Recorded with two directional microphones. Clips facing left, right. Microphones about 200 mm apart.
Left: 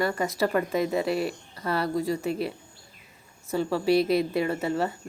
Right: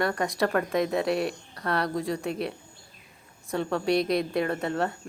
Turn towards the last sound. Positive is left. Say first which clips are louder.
# left 1 dB
turn(degrees=5)  # may be behind; listen again after turning